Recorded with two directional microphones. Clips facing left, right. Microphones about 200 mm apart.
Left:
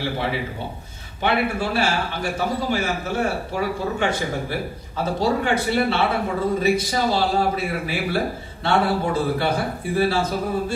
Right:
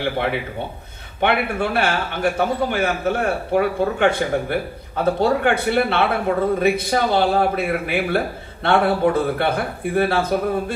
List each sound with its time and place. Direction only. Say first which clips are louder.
0.0 s a man's voice: right 3 dB; 60° right (ahead or behind)